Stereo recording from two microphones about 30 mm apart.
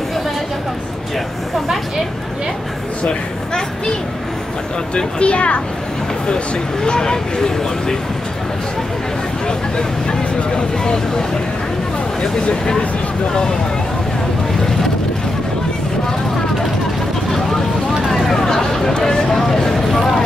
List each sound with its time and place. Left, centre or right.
4.9 s speech: left
6.2 s speech: left
12.2 s speech: left
18.1 s a sound: centre
18.9 s speech: left